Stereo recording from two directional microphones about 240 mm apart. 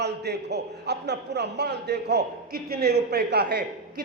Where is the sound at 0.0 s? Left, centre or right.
Right.